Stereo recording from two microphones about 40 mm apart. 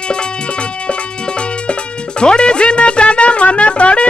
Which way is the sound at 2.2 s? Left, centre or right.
Left.